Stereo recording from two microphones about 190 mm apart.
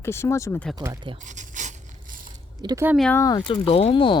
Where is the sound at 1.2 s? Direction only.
40° right (ahead or behind).